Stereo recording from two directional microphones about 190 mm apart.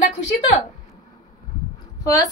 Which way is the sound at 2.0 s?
20° left (ahead or behind).